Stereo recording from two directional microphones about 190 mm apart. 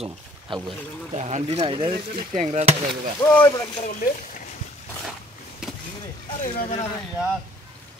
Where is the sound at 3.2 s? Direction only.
10° left (ahead or behind).